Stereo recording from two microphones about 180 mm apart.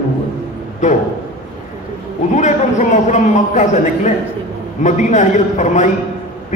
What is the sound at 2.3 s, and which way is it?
A man's voice, 45° left (ahead or behind).